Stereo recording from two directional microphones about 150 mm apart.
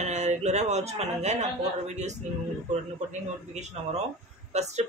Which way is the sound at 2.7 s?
50° right (ahead or behind).